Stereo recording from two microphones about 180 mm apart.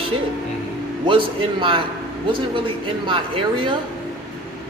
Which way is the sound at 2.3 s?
30° right (ahead or behind).